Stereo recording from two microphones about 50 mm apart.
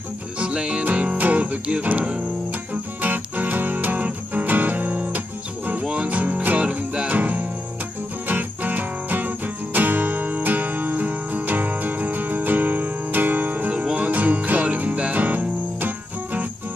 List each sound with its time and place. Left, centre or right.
0.4 s music: centre; by 16.4 s right